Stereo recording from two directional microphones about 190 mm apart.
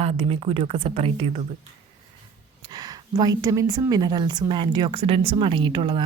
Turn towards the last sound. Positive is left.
turn(degrees=-25)  # may be behind; listen again after turning